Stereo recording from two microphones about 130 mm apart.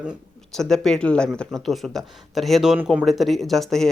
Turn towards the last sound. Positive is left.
turn(degrees=0)  # may be behind; listen again after turning